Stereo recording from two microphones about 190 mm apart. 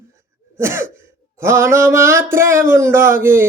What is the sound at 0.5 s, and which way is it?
Cough, 15° right (ahead or behind).